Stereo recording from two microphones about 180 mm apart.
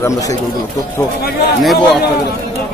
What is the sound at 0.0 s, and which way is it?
Speech, 20° left (ahead or behind).